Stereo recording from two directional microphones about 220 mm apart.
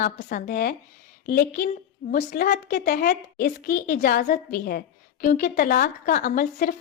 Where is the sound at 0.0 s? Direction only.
40° left (ahead or behind).